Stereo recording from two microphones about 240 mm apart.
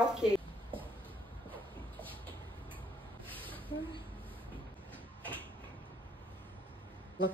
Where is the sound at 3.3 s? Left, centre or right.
Right.